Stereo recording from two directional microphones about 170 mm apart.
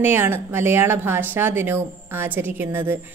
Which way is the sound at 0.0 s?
15° right (ahead or behind).